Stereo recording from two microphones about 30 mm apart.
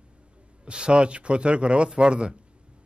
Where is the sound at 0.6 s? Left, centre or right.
Right.